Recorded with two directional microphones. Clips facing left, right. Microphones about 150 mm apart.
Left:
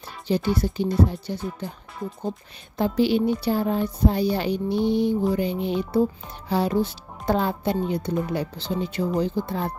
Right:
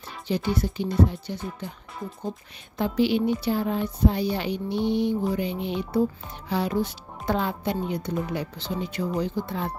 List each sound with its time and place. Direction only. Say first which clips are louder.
0.3 s speech: left 3 dB; 35° left (ahead or behind)
2.8 s speech: left 2 dB; 35° left (ahead or behind)